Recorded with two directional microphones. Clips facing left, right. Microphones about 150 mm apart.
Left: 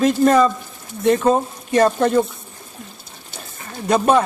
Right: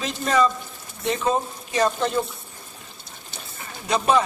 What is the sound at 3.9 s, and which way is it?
Speech, 50° left (ahead or behind).